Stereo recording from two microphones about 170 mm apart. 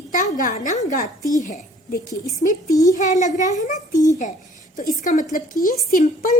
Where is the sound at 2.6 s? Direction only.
20° left (ahead or behind).